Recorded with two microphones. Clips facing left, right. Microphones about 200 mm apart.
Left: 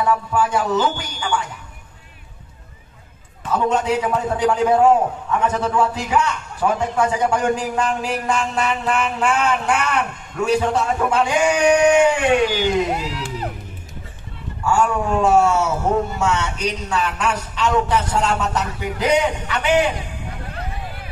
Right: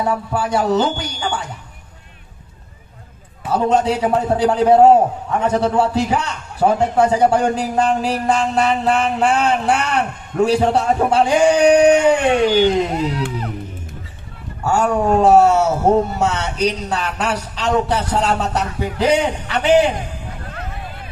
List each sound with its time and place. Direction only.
0.0 s a man's voice: 35° right (ahead or behind)
3.4 s a man's voice: 35° right (ahead or behind)
14.6 s a man's voice: 40° right (ahead or behind)